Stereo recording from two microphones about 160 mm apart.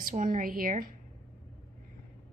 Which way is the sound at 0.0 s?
55° right (ahead or behind).